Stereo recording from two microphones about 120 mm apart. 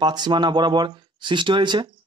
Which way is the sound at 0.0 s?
35° right (ahead or behind).